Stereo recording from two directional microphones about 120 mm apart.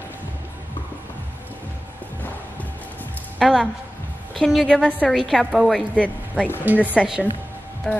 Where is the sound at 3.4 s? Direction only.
Centre (ahead or behind).